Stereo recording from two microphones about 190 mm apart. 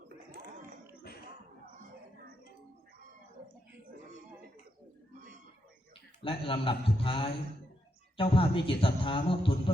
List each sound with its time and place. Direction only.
6.2 s a man's voice: 30° left (ahead or behind)